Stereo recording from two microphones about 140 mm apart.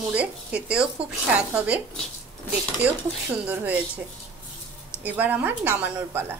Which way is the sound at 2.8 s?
10° right (ahead or behind).